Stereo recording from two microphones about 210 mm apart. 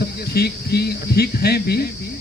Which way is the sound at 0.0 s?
50° left (ahead or behind).